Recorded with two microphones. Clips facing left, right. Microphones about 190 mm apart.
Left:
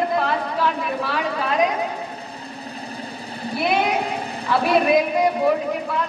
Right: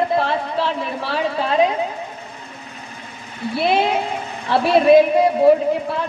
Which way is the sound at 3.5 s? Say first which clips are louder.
Right 3 dB; 30° right (ahead or behind).